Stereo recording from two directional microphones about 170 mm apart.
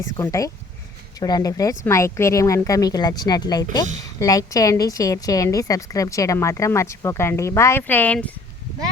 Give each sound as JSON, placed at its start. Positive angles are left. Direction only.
{"t": 0.2, "sound": "a woman's voice", "side_deg": 20}